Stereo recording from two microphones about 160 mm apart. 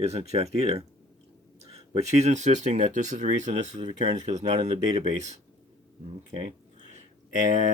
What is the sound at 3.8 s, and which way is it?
Speech, 30° right (ahead or behind).